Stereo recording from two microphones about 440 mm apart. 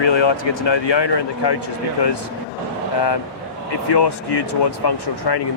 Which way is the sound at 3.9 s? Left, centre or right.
Left.